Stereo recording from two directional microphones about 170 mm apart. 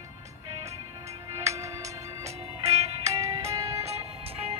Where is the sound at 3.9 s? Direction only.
35° right (ahead or behind).